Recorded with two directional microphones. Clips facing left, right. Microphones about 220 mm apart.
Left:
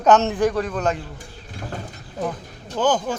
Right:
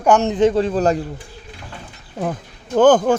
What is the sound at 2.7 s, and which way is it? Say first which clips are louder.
Speech: right 9 dB; 55° right (ahead or behind).